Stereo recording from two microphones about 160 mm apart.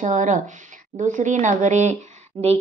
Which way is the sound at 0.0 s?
50° right (ahead or behind).